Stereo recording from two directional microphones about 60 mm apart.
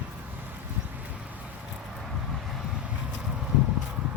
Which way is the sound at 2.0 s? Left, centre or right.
Centre.